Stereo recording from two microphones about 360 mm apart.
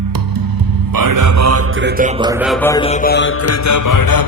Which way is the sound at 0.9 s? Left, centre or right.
Right.